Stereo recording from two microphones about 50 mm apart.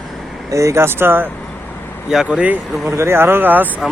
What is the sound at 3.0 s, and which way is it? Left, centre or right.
Speech, right.